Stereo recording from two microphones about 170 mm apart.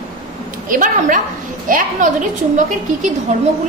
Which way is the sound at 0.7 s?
50° right (ahead or behind).